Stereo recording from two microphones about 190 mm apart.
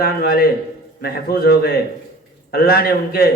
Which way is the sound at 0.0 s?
55° left (ahead or behind).